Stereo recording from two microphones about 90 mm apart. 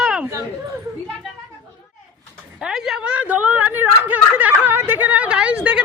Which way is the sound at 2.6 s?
5° right (ahead or behind).